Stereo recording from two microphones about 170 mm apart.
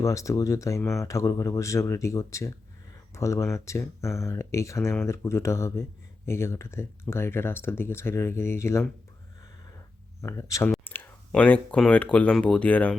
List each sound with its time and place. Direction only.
0.0 s speech: 20° left (ahead or behind)
10.2 s speech: 15° left (ahead or behind)